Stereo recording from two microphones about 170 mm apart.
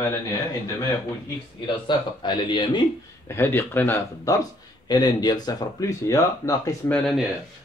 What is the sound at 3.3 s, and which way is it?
Speech, 10° left (ahead or behind).